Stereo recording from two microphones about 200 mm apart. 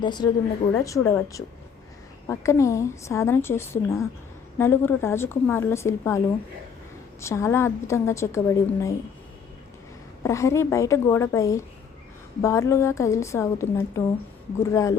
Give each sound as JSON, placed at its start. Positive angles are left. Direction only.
{"t": 0.0, "sound": "a woman's voice", "side_deg": 20}
{"t": 10.2, "sound": "a woman's voice", "side_deg": 15}